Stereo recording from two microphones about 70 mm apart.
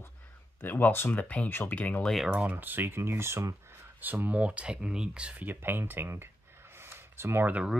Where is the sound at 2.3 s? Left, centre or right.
Right.